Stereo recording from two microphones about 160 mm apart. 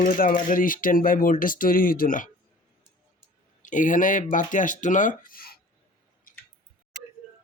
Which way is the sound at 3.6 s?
55° left (ahead or behind).